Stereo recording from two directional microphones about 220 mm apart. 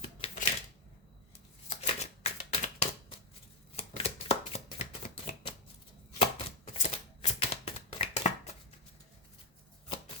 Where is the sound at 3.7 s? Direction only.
30° left (ahead or behind).